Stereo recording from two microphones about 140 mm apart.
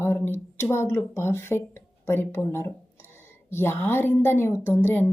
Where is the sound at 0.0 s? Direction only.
15° left (ahead or behind).